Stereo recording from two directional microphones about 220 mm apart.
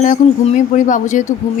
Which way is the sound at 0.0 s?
35° left (ahead or behind).